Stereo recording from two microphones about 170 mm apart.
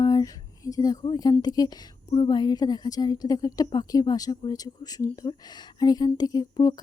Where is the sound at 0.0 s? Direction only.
20° left (ahead or behind).